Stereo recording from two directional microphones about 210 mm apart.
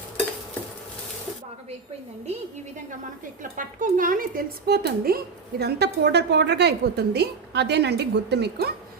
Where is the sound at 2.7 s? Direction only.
40° right (ahead or behind).